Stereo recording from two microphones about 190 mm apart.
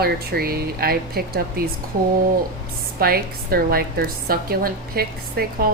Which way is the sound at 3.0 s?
50° right (ahead or behind).